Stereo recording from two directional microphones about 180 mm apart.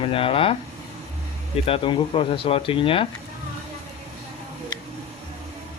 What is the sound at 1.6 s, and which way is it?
Speech, 30° left (ahead or behind).